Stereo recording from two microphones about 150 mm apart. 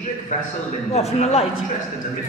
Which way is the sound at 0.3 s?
55° left (ahead or behind).